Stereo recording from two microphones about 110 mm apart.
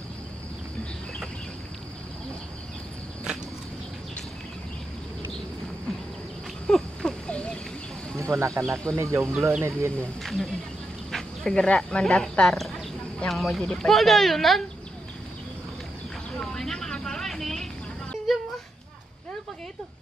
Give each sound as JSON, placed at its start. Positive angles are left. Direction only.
{"t": 6.7, "sound": "a sound", "side_deg": 5}
{"t": 8.2, "sound": "speech", "side_deg": -25}
{"t": 10.2, "sound": "speech", "side_deg": 0}
{"t": 16.3, "sound": "vehicle", "side_deg": 5}
{"t": 18.3, "sound": "children playing", "side_deg": 0}